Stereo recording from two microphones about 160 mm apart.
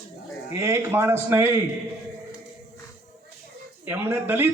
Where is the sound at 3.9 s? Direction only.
10° right (ahead or behind).